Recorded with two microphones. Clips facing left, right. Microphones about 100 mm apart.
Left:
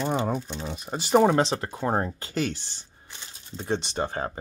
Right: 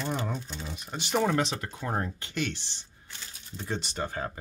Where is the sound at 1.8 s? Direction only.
40° left (ahead or behind).